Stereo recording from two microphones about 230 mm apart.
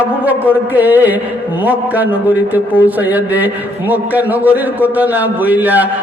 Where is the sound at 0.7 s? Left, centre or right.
Centre.